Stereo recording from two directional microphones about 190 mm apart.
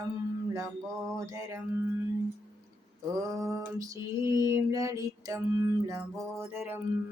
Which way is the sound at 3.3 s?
15° right (ahead or behind).